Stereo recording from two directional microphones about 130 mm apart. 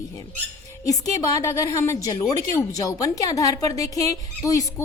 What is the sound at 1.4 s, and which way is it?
Speech, 25° left (ahead or behind).